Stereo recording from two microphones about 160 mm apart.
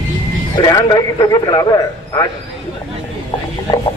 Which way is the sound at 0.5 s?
25° left (ahead or behind).